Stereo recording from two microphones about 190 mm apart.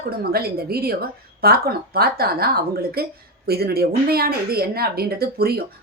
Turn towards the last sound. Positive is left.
turn(degrees=-55)  # may be behind; listen again after turning